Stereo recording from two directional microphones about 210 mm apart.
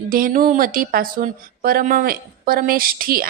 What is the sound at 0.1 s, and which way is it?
Speech, 45° right (ahead or behind).